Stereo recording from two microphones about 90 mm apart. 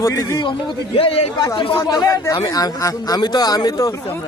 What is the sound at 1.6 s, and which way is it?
Speech, 80° left.